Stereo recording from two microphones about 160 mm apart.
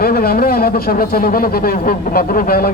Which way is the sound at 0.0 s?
70° left (ahead or behind).